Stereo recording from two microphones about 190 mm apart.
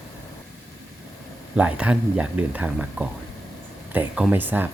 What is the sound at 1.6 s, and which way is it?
Speech, 5° right (ahead or behind).